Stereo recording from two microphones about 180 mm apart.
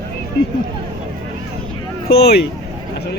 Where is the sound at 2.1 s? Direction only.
65° left (ahead or behind).